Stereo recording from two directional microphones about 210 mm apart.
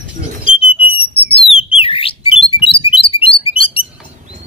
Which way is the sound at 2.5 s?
25° left (ahead or behind).